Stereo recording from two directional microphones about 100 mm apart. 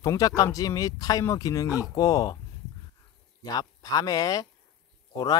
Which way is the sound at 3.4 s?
40° left (ahead or behind).